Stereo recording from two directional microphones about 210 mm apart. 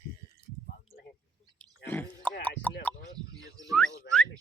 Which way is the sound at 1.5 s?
10° left (ahead or behind).